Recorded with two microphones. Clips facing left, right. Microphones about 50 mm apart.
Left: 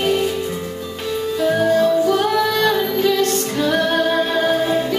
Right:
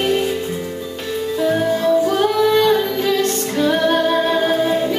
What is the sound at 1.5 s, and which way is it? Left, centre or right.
Music, centre.